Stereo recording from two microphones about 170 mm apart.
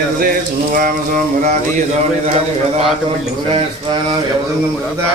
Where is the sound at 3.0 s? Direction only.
30° right (ahead or behind).